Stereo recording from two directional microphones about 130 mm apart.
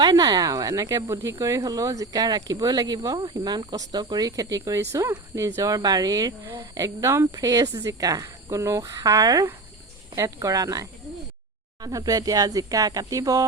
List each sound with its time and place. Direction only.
0.0 s speech: 30° right (ahead or behind)